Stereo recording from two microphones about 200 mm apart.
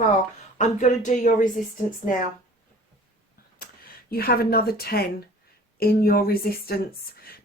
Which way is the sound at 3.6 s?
50° left (ahead or behind).